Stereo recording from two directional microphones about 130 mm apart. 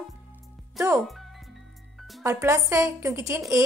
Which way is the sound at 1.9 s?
Centre (ahead or behind).